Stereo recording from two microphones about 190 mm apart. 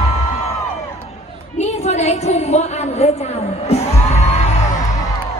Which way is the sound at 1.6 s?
35° left (ahead or behind).